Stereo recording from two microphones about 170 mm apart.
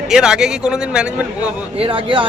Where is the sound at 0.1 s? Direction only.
5° right (ahead or behind).